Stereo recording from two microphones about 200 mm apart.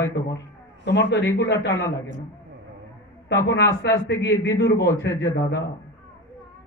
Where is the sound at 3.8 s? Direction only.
60° left (ahead or behind).